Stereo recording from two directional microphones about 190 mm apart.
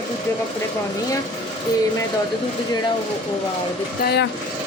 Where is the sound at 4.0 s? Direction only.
60° left (ahead or behind).